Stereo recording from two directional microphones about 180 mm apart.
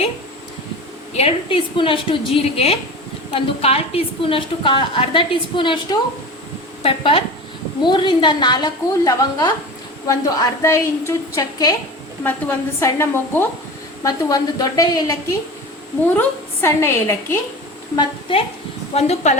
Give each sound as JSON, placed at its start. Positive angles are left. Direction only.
{"t": 1.1, "sound": "a woman's voice", "side_deg": 30}
{"t": 16.1, "sound": "a woman's voice", "side_deg": 15}
{"t": 17.9, "sound": "a woman's voice", "side_deg": 30}